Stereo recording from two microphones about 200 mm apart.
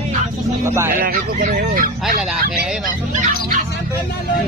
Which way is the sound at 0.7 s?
10° right (ahead or behind).